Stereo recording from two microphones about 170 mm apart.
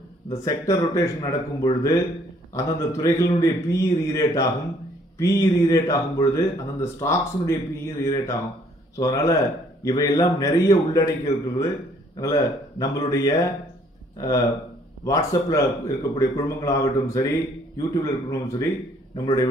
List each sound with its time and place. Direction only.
0.3 s a man's voice: 20° left (ahead or behind)